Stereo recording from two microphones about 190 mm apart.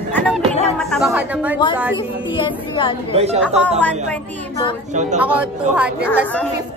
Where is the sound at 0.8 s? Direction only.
Centre (ahead or behind).